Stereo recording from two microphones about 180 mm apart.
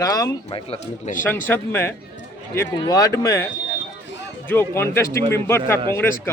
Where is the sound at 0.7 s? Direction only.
40° left (ahead or behind).